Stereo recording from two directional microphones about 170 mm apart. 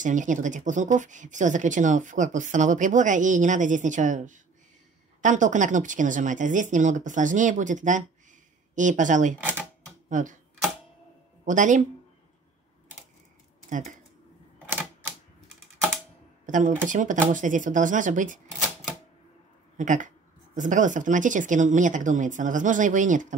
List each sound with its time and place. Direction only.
0.0 s speech: 50° right (ahead or behind)
9.4 s typewriter: 10° right (ahead or behind)
10.0 s speech: 50° right (ahead or behind)
11.4 s speech: 45° right (ahead or behind)
13.7 s speech: 50° right (ahead or behind)
14.7 s typewriter: 10° right (ahead or behind)
16.4 s speech: 50° right (ahead or behind)
19.8 s speech: 50° right (ahead or behind)